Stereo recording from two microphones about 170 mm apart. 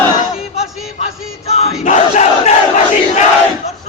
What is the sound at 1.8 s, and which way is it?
Crowd, 40° left (ahead or behind).